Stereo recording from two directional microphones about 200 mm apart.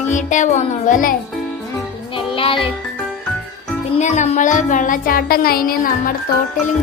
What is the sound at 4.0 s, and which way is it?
Speech, 35° left (ahead or behind).